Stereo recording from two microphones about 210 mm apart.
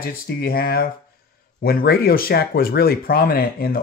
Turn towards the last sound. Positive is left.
turn(degrees=45)  # may be behind; listen again after turning